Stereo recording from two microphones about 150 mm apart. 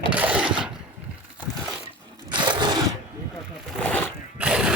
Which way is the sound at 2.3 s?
30° right (ahead or behind).